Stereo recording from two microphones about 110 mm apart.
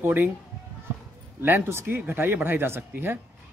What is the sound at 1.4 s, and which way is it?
Speech, 20° right (ahead or behind).